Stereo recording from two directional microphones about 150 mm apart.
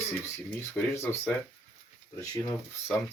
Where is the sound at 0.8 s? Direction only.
20° left (ahead or behind).